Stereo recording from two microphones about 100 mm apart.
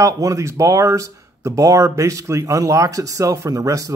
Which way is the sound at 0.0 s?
35° right (ahead or behind).